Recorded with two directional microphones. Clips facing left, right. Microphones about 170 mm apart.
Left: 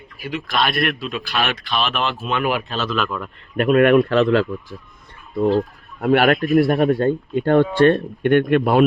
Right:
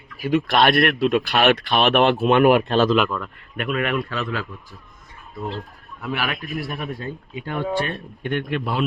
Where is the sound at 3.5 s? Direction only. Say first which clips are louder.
Left 9 dB; 40° left (ahead or behind).